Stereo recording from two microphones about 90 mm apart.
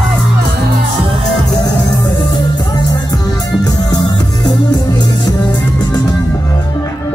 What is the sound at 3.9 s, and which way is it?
Music, 60° left (ahead or behind).